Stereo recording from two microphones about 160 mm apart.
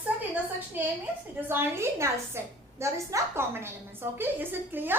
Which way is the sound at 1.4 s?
15° right (ahead or behind).